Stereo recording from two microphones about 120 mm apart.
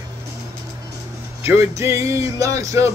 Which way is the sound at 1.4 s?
25° right (ahead or behind).